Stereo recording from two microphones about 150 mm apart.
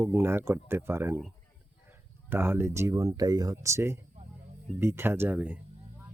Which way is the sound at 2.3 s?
15° right (ahead or behind).